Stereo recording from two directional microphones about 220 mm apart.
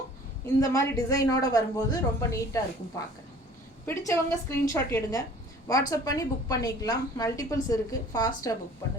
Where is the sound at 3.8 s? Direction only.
10° left (ahead or behind).